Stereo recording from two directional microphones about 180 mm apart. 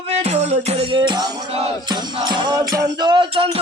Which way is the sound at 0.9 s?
25° right (ahead or behind).